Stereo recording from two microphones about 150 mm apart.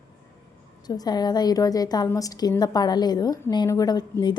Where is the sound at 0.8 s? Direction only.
25° left (ahead or behind).